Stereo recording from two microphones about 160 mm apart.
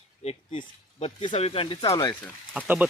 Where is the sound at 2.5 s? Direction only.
10° right (ahead or behind).